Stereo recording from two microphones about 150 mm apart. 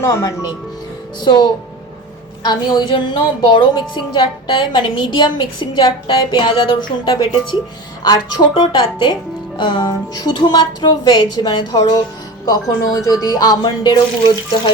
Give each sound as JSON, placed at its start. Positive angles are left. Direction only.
{"t": 0.0, "sound": "a woman's voice", "side_deg": 20}
{"t": 1.2, "sound": "a woman's voice", "side_deg": 30}
{"t": 8.5, "sound": "a woman's voice", "side_deg": 30}